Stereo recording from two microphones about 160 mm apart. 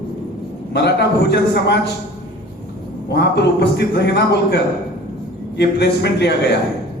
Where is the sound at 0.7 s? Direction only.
90° left.